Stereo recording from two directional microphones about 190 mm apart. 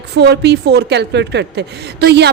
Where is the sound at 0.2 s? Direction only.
60° right (ahead or behind).